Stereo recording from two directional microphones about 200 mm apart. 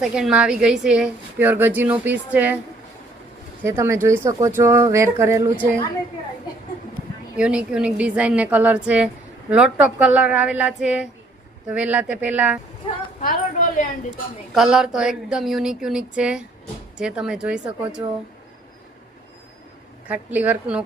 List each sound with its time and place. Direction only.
0.0 s a woman's voice: 5° right (ahead or behind)
3.6 s speech: 15° right (ahead or behind)
7.3 s a woman's voice: 5° right (ahead or behind)
13.1 s a sound: 40° left (ahead or behind)
14.5 s a woman's voice: 5° right (ahead or behind)
20.1 s speech: 5° right (ahead or behind)